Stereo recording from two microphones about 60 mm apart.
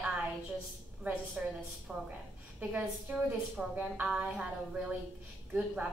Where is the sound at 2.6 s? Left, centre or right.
Right.